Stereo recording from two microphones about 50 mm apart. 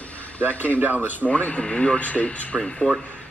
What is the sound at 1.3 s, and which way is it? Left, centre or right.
Speech, left.